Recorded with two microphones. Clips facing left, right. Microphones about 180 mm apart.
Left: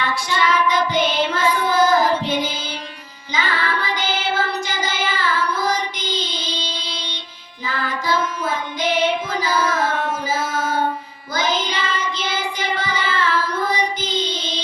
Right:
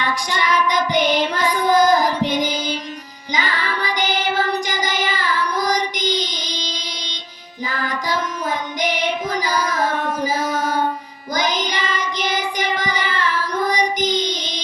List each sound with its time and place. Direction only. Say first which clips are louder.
0.0 s child singing: left 1 dB; 15° right (ahead or behind)
7.7 s a sound: left 1 dB; 15° right (ahead or behind)
10.5 s child singing: right 1 dB; 40° right (ahead or behind)
11.3 s child singing: even; 15° right (ahead or behind)